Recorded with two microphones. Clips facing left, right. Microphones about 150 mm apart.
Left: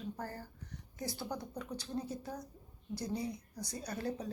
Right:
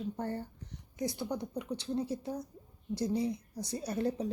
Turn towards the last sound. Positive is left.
turn(degrees=-25)  # may be behind; listen again after turning